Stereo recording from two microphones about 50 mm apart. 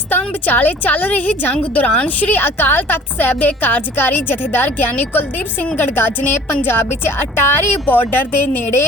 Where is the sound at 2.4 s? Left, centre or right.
Left.